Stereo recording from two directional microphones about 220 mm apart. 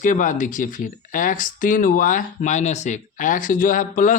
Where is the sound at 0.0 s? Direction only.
35° left (ahead or behind).